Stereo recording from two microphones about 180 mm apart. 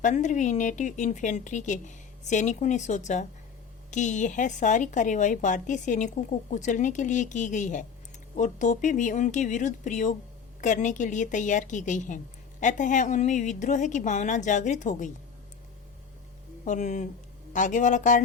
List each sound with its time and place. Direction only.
0.0 s a woman's voice: 45° left (ahead or behind)
16.6 s a woman's voice: 40° left (ahead or behind)